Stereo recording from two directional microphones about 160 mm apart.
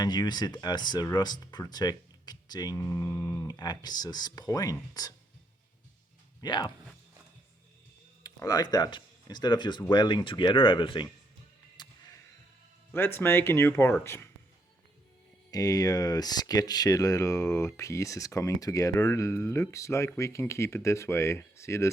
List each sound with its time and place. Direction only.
0.0 s speech: 25° left (ahead or behind)
6.4 s speech: 25° left (ahead or behind)
8.2 s speech: 25° left (ahead or behind)
11.8 s music: 25° left (ahead or behind)
12.9 s speech: 15° left (ahead or behind)
15.4 s speech: 20° left (ahead or behind)